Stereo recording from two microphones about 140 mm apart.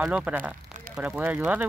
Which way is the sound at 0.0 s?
10° right (ahead or behind).